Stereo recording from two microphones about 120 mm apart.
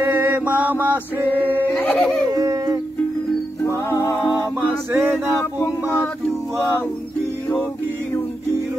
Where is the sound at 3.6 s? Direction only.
20° left (ahead or behind).